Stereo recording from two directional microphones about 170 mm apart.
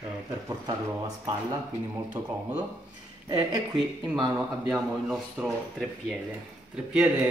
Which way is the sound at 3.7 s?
5° right (ahead or behind).